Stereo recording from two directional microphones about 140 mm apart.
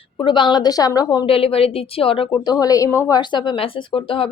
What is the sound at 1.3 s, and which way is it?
A woman's voice, 45° left (ahead or behind).